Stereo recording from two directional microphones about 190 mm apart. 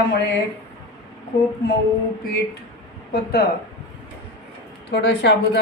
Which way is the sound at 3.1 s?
55° left (ahead or behind).